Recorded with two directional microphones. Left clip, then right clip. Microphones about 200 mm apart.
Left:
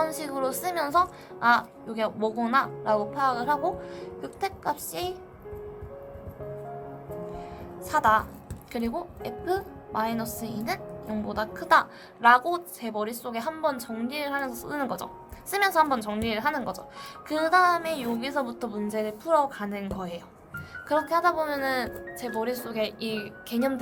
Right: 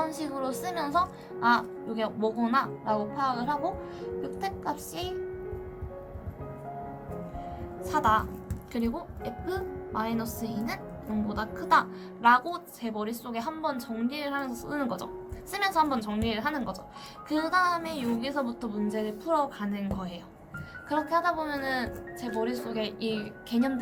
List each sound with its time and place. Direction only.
0.0 s speech: 45° left (ahead or behind)
7.9 s a woman's voice: 40° left (ahead or behind)